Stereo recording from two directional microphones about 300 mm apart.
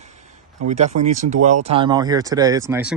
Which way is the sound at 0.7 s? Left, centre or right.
Right.